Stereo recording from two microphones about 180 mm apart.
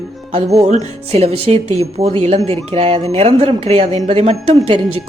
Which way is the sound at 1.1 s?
35° right (ahead or behind).